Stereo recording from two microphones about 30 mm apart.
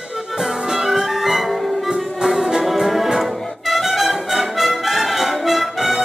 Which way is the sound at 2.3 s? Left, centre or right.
Right.